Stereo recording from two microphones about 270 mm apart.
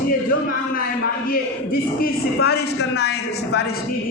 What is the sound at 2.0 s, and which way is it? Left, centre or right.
A man's voice, left.